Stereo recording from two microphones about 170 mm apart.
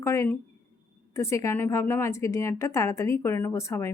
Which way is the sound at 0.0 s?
15° left (ahead or behind).